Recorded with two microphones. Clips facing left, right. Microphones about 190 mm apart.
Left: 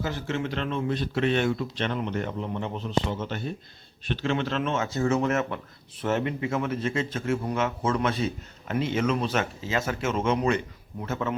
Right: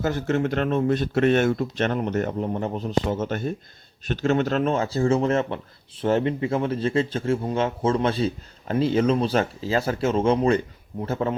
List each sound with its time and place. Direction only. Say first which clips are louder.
0.0 s speech: right 6 dB; 45° right (ahead or behind)